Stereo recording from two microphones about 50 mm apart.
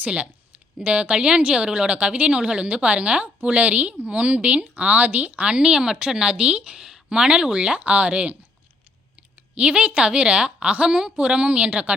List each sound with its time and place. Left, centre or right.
0.0 s speech: right
9.6 s speech: right